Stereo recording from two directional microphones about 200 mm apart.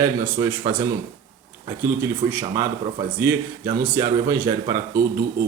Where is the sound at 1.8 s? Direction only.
10° right (ahead or behind).